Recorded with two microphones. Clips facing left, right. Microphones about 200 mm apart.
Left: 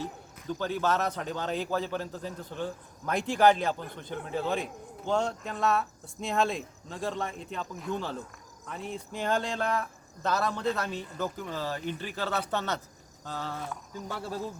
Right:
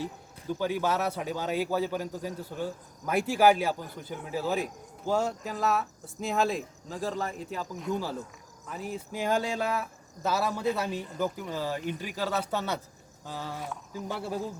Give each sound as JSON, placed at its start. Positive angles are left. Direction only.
{"t": 0.0, "sound": "speech", "side_deg": -10}